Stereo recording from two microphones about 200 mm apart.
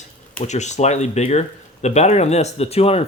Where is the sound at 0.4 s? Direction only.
35° left (ahead or behind).